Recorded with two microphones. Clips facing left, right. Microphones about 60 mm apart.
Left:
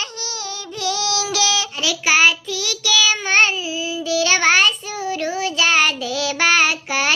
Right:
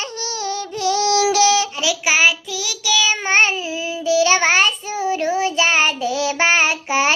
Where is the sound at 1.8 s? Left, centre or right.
Centre.